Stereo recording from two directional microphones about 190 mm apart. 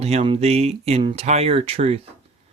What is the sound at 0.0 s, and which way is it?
Speech, 35° right (ahead or behind).